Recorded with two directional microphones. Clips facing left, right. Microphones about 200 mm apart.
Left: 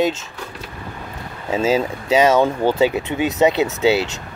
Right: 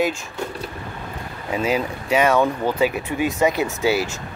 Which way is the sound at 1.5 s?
25° left (ahead or behind).